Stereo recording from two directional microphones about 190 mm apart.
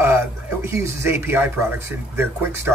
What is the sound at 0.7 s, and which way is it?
Speech, 15° right (ahead or behind).